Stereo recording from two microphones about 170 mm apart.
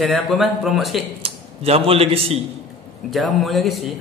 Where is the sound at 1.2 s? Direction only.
35° right (ahead or behind).